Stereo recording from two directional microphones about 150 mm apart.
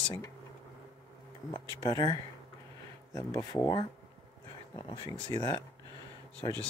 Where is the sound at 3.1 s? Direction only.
20° left (ahead or behind).